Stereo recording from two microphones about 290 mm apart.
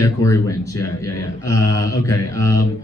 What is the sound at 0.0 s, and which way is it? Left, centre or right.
Mantra, centre.